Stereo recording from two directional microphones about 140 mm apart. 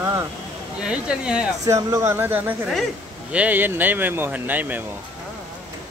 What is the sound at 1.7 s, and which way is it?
Speech, 25° right (ahead or behind).